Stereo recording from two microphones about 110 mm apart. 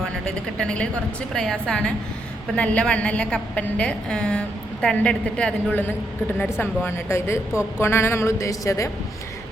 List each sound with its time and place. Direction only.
0.3 s a woman's voice: 10° left (ahead or behind); by 8.9 s 30° left (ahead or behind)